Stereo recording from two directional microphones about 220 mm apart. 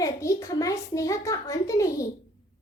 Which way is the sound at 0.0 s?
15° left (ahead or behind).